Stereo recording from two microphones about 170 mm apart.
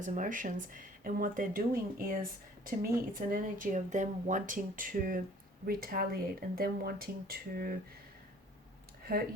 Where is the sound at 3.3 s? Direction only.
50° right (ahead or behind).